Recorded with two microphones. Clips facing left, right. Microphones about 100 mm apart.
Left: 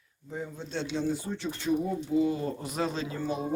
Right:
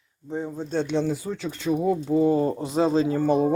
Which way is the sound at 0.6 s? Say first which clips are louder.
Right 9 dB; 45° right (ahead or behind).